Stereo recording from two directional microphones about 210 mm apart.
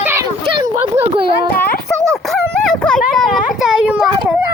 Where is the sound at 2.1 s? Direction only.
Centre (ahead or behind).